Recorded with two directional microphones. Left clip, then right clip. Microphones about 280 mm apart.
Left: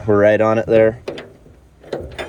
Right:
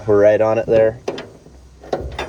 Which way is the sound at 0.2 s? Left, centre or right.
Left.